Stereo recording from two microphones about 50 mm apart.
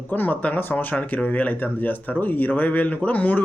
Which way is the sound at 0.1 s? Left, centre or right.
Left.